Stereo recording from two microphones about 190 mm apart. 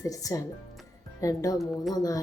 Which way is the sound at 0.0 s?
20° left (ahead or behind).